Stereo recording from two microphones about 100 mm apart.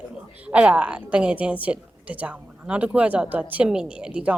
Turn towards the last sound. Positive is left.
turn(degrees=-10)  # may be behind; listen again after turning